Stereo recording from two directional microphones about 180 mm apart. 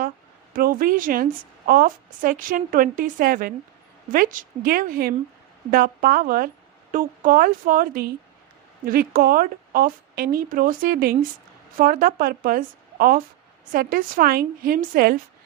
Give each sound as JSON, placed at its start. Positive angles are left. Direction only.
{"t": 0.5, "sound": "a woman's voice", "side_deg": -50}